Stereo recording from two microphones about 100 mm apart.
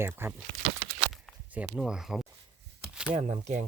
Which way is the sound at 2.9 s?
10° right (ahead or behind).